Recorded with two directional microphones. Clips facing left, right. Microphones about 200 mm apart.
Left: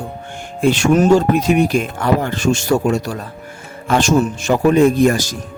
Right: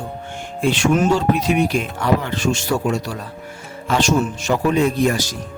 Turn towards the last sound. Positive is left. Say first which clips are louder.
# left 5 dB
turn(degrees=45)  # may be behind; listen again after turning